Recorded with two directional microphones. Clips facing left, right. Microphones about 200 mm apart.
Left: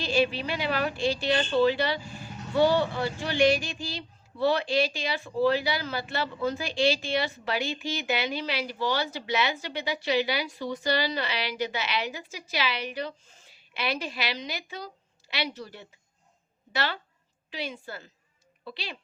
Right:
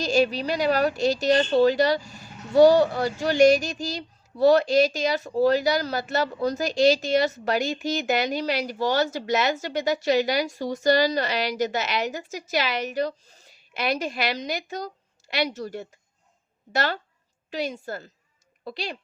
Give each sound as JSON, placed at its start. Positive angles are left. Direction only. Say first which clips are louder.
{"t": 0.0, "sound": "a woman's voice", "louder": "right 4 dB", "side_deg": -40}